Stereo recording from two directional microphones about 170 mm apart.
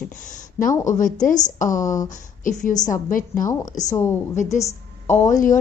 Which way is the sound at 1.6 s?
20° left (ahead or behind).